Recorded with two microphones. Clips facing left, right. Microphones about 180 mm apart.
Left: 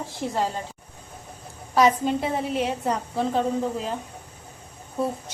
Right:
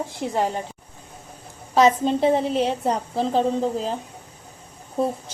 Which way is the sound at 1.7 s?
25° right (ahead or behind).